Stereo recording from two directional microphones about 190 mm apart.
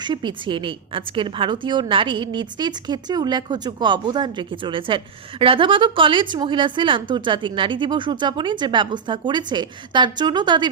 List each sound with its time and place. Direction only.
0.0 s a woman's voice: 25° right (ahead or behind)